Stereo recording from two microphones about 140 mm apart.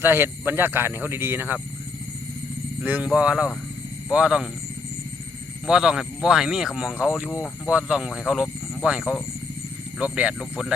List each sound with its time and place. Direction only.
0.0 s speech: 15° right (ahead or behind)
2.8 s speech: 10° right (ahead or behind)
5.6 s speech: 5° right (ahead or behind)